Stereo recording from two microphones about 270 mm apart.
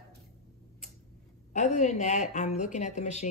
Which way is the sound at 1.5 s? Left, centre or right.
Left.